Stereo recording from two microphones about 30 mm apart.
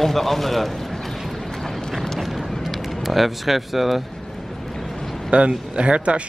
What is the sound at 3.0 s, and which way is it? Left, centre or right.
Speech, centre.